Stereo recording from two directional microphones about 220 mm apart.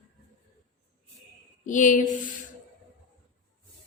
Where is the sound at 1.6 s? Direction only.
35° left (ahead or behind).